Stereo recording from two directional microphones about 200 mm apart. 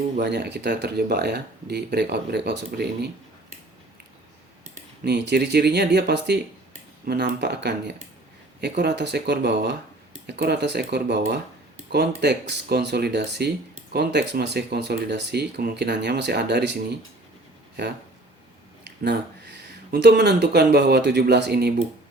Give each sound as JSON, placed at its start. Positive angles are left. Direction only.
{"t": 0.2, "sound": "speech", "side_deg": -55}
{"t": 5.0, "sound": "speech", "side_deg": -55}
{"t": 18.9, "sound": "speech", "side_deg": -55}